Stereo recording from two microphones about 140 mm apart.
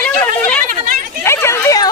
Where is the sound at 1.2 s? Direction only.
20° left (ahead or behind).